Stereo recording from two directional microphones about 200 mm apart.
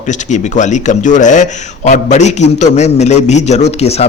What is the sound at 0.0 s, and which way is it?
Speech, 35° left (ahead or behind).